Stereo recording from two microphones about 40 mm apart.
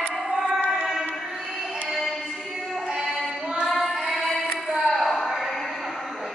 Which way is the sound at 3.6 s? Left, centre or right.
Centre.